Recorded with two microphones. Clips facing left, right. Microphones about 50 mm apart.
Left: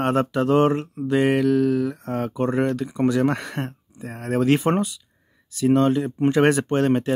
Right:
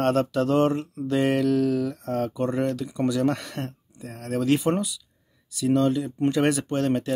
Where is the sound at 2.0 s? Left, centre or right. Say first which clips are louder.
Left 2 dB; left.